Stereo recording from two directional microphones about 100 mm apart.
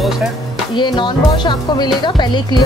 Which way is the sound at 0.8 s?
50° left (ahead or behind).